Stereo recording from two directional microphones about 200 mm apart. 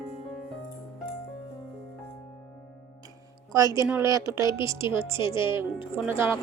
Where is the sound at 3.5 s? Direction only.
15° right (ahead or behind).